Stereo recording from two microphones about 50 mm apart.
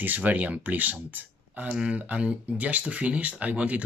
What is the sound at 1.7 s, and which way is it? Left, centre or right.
Speech, right.